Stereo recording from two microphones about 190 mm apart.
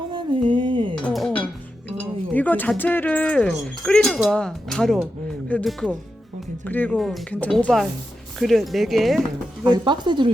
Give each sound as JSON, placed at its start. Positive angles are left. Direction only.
{"t": 0.1, "sound": "a sound", "side_deg": -25}
{"t": 1.0, "sound": "dishes", "side_deg": 5}
{"t": 2.0, "sound": "speech", "side_deg": 10}
{"t": 9.6, "sound": "speech", "side_deg": -25}